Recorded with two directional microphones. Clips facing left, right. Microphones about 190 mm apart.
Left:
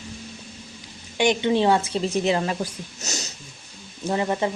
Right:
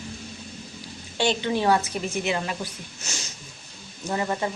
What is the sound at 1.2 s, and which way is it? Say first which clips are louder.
Speech: left 4 dB; 20° left (ahead or behind).